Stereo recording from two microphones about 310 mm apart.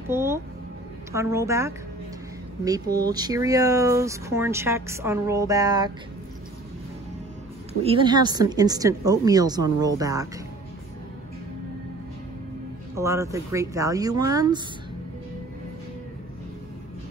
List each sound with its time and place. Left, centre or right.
0.1 s music: centre
1.1 s speech: centre
3.0 s speech: centre
7.8 s speech: centre
12.9 s speech: centre